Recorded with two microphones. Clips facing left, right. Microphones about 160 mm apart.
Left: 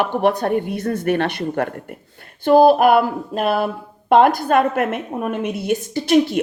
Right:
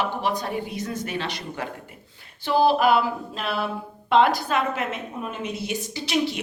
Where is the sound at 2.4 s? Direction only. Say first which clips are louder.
Left 8 dB; 50° left (ahead or behind).